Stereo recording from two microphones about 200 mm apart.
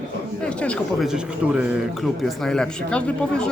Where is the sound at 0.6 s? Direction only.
Centre (ahead or behind).